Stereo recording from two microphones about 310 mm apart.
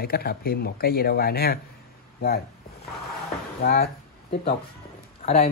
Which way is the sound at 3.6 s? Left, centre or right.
Left.